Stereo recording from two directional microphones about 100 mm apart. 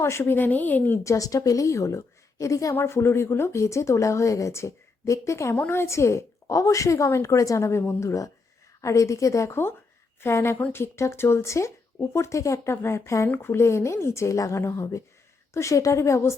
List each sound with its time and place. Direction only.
0.0 s a woman's voice: 25° left (ahead or behind)
1.0 s a woman's voice: 35° left (ahead or behind)